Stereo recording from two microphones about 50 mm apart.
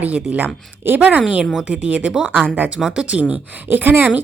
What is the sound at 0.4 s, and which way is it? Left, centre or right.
Speech, right.